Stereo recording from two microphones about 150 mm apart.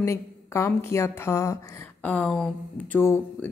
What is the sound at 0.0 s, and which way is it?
A woman's voice, 20° left (ahead or behind).